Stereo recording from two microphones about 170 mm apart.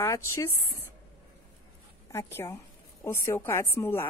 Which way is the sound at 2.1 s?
15° left (ahead or behind).